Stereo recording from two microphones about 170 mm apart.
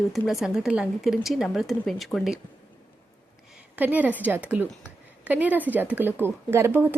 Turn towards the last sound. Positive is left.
turn(degrees=-15)  # may be behind; listen again after turning